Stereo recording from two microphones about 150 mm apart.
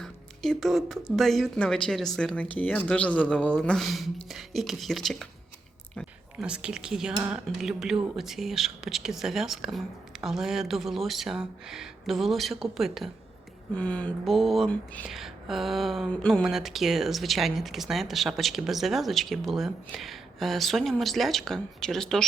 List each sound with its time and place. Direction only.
0.0 s a woman's voice: centre (ahead or behind)
6.4 s speech: 5° right (ahead or behind)
13.7 s speech: 10° left (ahead or behind)